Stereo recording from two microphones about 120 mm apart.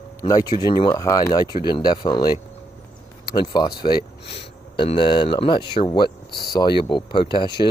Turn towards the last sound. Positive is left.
turn(degrees=40)  # may be behind; listen again after turning